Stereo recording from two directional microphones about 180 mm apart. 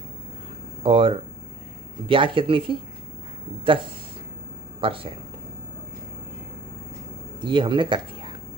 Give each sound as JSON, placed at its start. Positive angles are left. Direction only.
{"t": 0.8, "sound": "speech", "side_deg": -30}
{"t": 4.7, "sound": "speech", "side_deg": -30}
{"t": 7.3, "sound": "speech", "side_deg": -25}